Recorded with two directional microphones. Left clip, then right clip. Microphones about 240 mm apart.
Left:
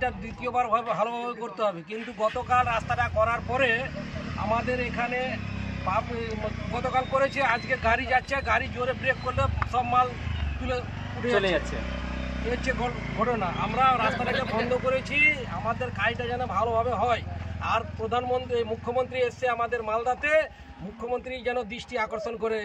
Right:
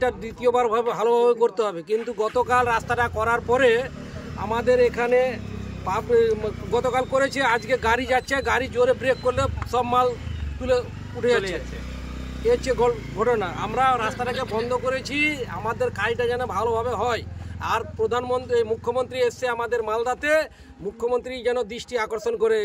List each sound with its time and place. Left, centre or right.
0.4 s speech: centre
12.6 s speech: centre